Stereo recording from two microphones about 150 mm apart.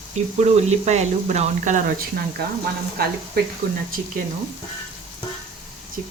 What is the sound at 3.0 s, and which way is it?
Speech, 90° right.